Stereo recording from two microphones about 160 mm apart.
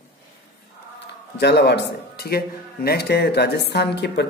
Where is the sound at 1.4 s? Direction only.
90° left.